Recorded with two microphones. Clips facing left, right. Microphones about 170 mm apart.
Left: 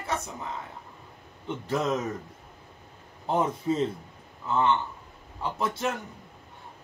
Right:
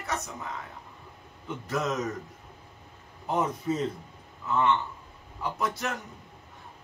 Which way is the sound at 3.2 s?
30° left (ahead or behind).